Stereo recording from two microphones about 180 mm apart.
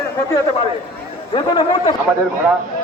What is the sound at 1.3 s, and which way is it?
Speech, 25° left (ahead or behind).